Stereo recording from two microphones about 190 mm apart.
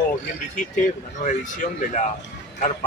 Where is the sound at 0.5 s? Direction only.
40° left (ahead or behind).